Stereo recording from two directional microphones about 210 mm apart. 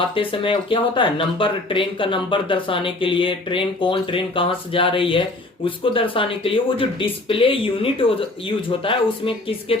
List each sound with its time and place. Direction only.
0.1 s speech: 25° left (ahead or behind)